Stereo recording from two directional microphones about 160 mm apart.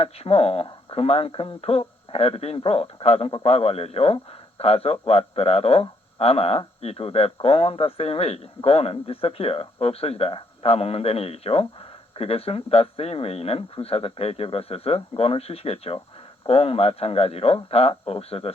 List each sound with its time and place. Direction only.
0.0 s speech: 40° left (ahead or behind)